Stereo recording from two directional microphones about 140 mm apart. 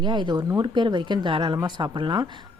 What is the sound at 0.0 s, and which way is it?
Speech, 35° right (ahead or behind).